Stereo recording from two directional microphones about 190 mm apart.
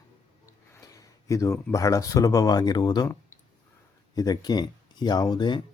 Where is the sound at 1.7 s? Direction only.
15° left (ahead or behind).